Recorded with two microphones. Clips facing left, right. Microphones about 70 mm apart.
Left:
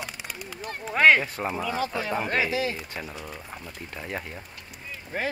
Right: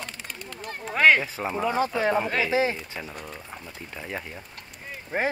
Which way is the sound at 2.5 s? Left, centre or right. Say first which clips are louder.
Right 4 dB; right.